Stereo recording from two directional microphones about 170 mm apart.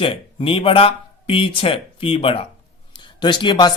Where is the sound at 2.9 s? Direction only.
25° left (ahead or behind).